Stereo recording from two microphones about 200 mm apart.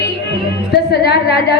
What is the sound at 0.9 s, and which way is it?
Speech, 50° left (ahead or behind).